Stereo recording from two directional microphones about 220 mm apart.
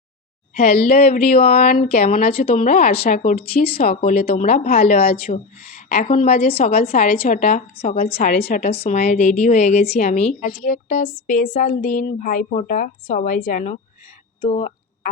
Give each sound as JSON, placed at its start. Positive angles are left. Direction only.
{"t": 0.5, "sound": "a woman's voice", "side_deg": 40}
{"t": 8.7, "sound": "a woman's voice", "side_deg": 30}
{"t": 14.4, "sound": "a sound", "side_deg": 30}